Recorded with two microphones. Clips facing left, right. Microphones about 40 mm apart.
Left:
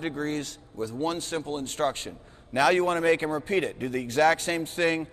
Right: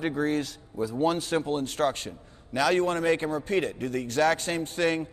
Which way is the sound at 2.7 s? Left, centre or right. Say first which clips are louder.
Left 1 dB; centre.